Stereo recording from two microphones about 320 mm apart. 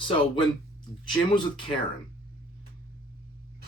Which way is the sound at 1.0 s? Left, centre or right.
Centre.